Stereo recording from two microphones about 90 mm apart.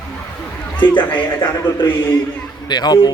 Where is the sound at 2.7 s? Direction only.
50° left (ahead or behind).